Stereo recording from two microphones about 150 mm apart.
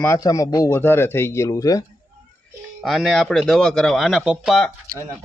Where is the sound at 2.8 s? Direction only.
Centre (ahead or behind).